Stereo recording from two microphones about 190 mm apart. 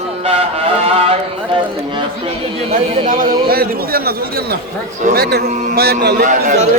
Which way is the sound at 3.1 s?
50° right (ahead or behind).